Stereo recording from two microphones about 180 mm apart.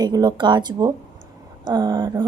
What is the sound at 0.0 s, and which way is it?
Speech, 20° right (ahead or behind).